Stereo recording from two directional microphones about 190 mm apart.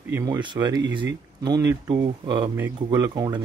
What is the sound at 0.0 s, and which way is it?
Speech, 15° right (ahead or behind).